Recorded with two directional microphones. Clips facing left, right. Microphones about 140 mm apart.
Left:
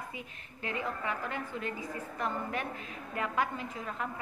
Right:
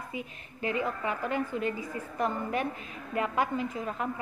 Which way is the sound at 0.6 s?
20° right (ahead or behind).